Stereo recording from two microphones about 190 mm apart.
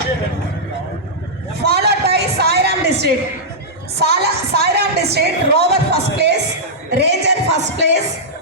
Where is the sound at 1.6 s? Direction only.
60° right (ahead or behind).